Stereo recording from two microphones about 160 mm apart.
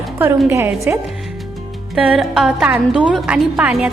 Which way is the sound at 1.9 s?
5° right (ahead or behind).